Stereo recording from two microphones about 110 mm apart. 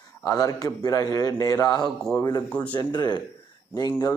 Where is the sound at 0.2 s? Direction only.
35° left (ahead or behind).